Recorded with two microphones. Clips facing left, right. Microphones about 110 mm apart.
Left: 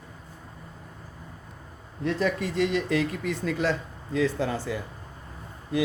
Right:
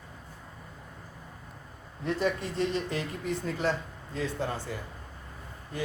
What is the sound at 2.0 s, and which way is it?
Speech, 90° left.